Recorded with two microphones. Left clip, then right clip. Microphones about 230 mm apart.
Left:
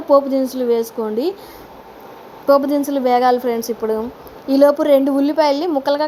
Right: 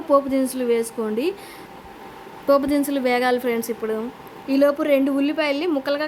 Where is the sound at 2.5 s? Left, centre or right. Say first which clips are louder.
Left 4 dB; centre.